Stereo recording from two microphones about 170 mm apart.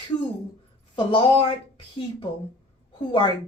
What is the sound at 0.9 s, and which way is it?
Speech, 30° left (ahead or behind).